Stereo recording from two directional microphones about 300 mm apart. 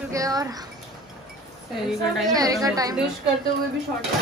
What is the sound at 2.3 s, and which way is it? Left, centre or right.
Speech, centre.